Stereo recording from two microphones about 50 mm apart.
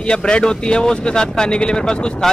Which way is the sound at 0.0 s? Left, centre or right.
Centre.